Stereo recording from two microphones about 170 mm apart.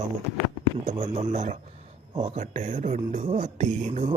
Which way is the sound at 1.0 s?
40° right (ahead or behind).